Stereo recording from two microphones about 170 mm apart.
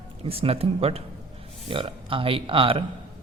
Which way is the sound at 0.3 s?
35° right (ahead or behind).